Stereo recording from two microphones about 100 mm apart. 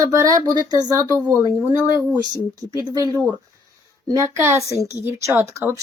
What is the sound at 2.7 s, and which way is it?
A woman's voice, 35° right (ahead or behind).